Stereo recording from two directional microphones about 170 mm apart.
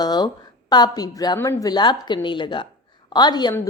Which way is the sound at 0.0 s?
25° left (ahead or behind).